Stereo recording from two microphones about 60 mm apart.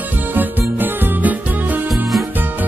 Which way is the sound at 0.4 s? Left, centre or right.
Right.